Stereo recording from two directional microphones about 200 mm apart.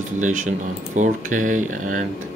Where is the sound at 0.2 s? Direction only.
40° right (ahead or behind).